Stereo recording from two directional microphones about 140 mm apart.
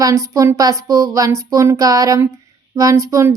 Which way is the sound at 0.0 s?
25° right (ahead or behind).